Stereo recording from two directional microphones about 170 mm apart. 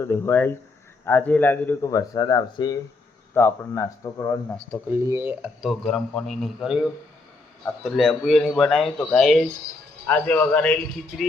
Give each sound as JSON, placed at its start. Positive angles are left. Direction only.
{"t": 0.0, "sound": "speech", "side_deg": 15}
{"t": 4.9, "sound": "speech", "side_deg": -15}
{"t": 5.6, "sound": "speech", "side_deg": 5}